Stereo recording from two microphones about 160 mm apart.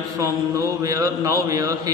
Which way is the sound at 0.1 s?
20° right (ahead or behind).